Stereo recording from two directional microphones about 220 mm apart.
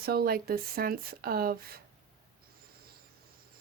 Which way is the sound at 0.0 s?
45° right (ahead or behind).